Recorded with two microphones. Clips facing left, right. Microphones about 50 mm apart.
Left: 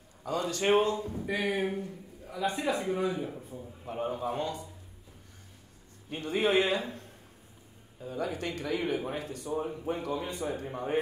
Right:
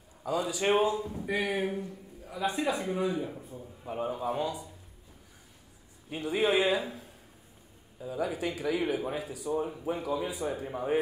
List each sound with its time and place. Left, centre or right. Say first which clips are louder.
0.2 s a man's voice: right 1 dB; centre
6.0 s a man's voice: right 1 dB; centre